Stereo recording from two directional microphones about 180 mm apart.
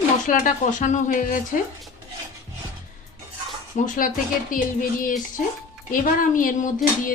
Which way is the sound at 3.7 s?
45° left (ahead or behind).